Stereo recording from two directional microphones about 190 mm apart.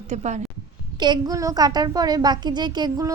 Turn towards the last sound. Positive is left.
turn(degrees=-20)  # may be behind; listen again after turning